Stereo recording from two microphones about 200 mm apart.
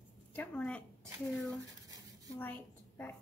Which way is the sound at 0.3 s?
5° left (ahead or behind).